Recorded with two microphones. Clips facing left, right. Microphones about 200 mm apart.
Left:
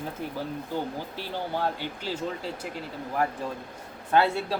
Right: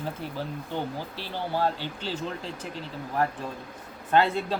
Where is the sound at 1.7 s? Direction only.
10° left (ahead or behind).